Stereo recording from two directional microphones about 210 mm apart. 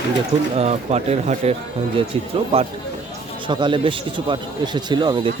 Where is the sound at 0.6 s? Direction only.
30° right (ahead or behind).